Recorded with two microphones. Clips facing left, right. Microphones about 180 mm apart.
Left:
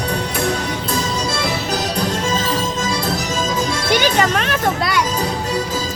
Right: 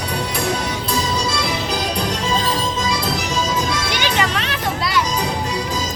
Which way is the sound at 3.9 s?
45° left (ahead or behind).